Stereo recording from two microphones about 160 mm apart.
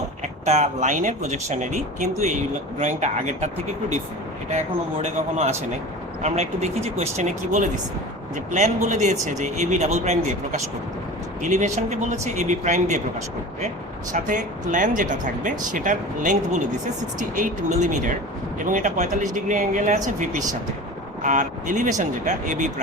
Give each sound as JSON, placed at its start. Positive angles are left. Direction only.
{"t": 0.4, "sound": "speech", "side_deg": -45}
{"t": 6.2, "sound": "speech", "side_deg": -40}
{"t": 14.1, "sound": "speech", "side_deg": -55}